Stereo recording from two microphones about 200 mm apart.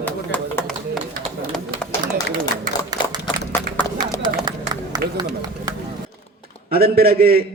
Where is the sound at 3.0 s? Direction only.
25° left (ahead or behind).